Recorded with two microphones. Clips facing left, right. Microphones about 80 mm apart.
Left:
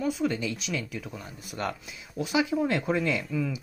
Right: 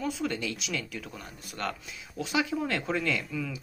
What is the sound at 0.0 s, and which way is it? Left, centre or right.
Speech, centre.